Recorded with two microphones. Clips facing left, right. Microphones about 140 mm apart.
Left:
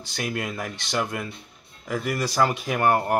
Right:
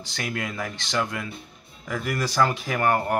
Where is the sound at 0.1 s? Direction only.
10° left (ahead or behind).